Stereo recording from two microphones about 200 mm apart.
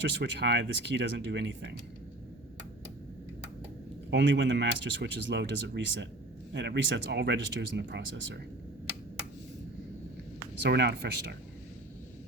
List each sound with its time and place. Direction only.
0.0 s speech: 60° right (ahead or behind)
4.1 s speech: 65° right (ahead or behind)
10.6 s speech: 60° right (ahead or behind)